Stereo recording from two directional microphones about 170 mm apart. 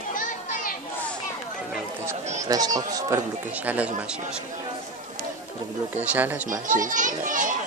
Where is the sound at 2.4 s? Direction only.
20° right (ahead or behind).